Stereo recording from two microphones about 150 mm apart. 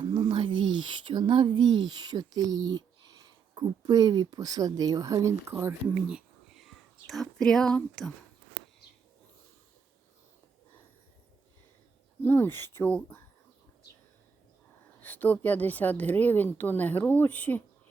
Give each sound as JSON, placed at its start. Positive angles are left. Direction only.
{"t": 0.0, "sound": "speech", "side_deg": -30}
{"t": 5.9, "sound": "whispering", "side_deg": -5}
{"t": 12.2, "sound": "a woman's voice", "side_deg": 15}
{"t": 15.0, "sound": "a woman's voice", "side_deg": 15}